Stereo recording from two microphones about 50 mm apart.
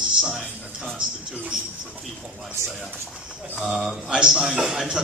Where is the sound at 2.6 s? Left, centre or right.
Right.